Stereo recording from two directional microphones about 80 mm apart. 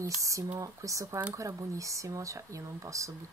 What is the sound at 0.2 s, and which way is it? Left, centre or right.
Speech, right.